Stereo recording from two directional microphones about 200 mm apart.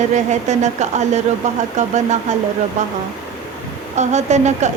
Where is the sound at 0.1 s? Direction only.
35° right (ahead or behind).